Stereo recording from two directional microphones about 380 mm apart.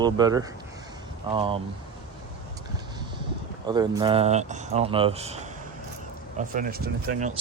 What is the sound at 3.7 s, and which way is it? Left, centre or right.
Speech, centre.